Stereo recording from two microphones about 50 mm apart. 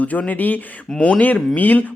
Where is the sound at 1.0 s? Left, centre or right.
Left.